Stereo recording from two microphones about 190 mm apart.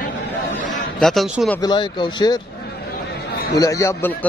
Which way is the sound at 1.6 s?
25° left (ahead or behind).